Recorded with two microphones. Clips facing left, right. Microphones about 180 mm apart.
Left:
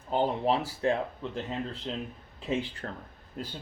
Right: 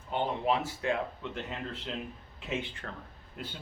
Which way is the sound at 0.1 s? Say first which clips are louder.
Left 3 dB; 35° left (ahead or behind).